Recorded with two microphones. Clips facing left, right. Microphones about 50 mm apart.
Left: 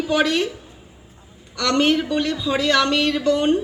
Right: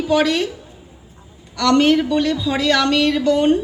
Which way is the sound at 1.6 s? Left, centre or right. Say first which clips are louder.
Right 4 dB; centre.